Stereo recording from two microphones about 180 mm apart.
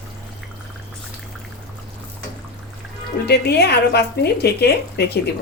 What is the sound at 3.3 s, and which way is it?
A woman's voice, 65° left (ahead or behind).